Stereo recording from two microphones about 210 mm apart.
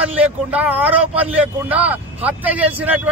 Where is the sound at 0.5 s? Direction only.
5° right (ahead or behind).